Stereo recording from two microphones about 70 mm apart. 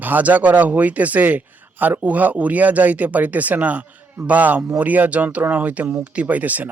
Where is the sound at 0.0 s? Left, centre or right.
Right.